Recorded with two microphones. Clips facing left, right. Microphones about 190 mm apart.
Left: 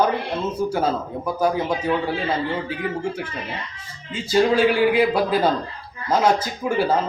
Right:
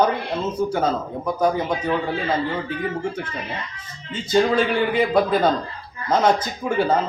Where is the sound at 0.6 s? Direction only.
25° right (ahead or behind).